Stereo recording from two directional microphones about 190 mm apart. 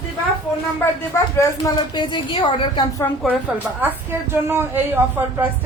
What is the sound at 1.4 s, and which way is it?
A woman's voice, 20° left (ahead or behind).